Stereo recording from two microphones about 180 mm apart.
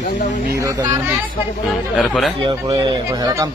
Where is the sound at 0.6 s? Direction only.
15° right (ahead or behind).